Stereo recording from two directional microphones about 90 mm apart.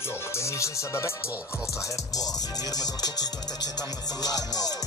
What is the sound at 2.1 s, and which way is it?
Music, 45° left (ahead or behind).